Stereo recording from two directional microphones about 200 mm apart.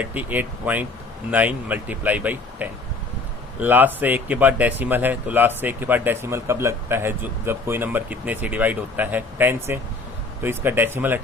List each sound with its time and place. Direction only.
0.0 s speech: 10° right (ahead or behind)